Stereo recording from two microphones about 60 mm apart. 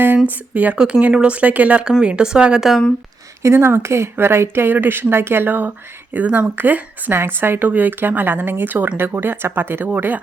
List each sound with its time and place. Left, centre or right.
0.3 s speech: right
3.4 s speech: right
6.2 s speech: centre
6.6 s speech: right